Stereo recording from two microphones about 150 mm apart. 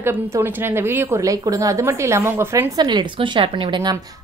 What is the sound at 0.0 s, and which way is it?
A woman's voice, 15° right (ahead or behind).